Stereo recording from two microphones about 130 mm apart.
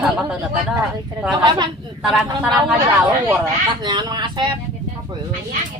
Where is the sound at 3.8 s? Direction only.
35° right (ahead or behind).